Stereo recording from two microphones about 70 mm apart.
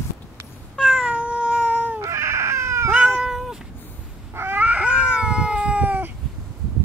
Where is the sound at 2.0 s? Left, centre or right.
Right.